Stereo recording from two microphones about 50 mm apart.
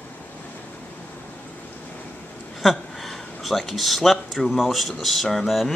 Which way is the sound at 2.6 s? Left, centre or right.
Centre.